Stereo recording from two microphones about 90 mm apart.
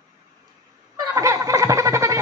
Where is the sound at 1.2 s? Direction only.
40° right (ahead or behind).